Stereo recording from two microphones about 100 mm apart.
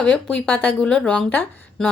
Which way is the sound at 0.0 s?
10° left (ahead or behind).